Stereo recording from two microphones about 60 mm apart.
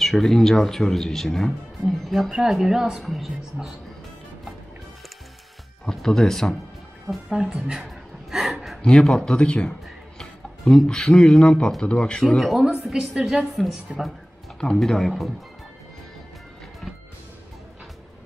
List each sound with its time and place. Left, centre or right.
0.0 s speech: centre
5.9 s speech: centre
7.2 s a sound: centre
8.8 s speech: centre
12.4 s speech: centre
14.6 s speech: centre